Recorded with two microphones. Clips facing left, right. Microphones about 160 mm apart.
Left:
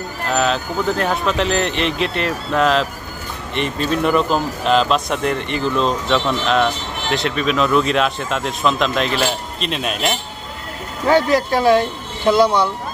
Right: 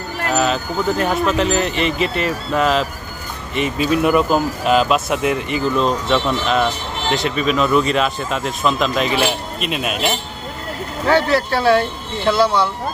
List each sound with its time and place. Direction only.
0.3 s speech: centre (ahead or behind)
11.1 s speech: 15° left (ahead or behind)